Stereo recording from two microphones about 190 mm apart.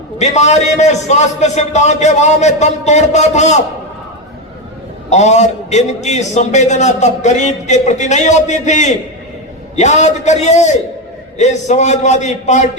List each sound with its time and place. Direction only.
0.2 s a man's voice: 35° left (ahead or behind)
5.0 s a man's voice: 35° left (ahead or behind)